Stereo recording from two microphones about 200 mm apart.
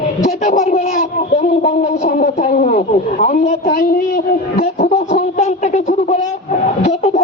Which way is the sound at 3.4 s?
50° left (ahead or behind).